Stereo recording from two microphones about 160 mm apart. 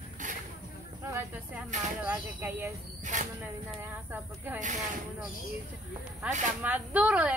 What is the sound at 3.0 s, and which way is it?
Speech, 50° right (ahead or behind).